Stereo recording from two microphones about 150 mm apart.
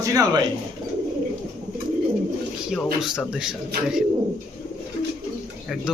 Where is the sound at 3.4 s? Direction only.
5° right (ahead or behind).